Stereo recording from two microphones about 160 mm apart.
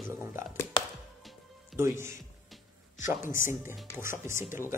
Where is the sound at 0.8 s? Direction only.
30° left (ahead or behind).